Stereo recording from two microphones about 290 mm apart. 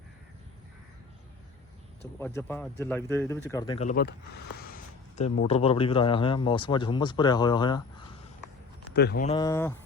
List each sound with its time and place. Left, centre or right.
2.1 s speech: centre
3.8 s speech: left; by 7.8 s centre
8.9 s speech: left
9.2 s speech: centre